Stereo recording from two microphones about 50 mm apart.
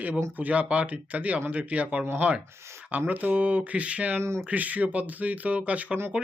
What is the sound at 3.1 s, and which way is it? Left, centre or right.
Speech, right.